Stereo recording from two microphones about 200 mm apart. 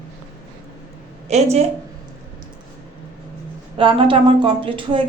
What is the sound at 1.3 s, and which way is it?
Speech, 35° right (ahead or behind).